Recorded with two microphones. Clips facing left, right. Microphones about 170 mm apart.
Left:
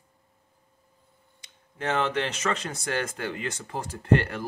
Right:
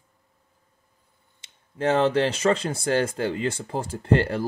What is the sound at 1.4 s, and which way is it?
Speech, 30° right (ahead or behind).